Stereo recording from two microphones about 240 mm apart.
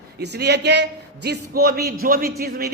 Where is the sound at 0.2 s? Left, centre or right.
Right.